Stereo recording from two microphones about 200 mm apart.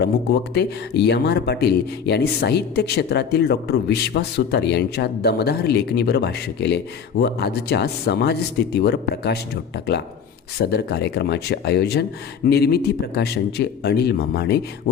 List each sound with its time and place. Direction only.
0.5 s a man's voice: 55° left (ahead or behind)